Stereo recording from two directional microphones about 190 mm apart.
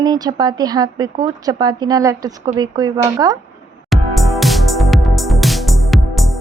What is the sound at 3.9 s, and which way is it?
Music, centre (ahead or behind).